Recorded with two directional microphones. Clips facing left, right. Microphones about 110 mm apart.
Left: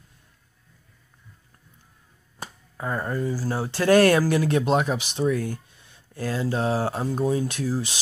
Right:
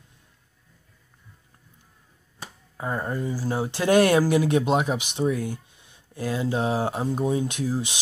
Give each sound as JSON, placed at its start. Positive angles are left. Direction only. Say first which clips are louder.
{"t": 2.8, "sound": "speech", "louder": "left 1 dB", "side_deg": -15}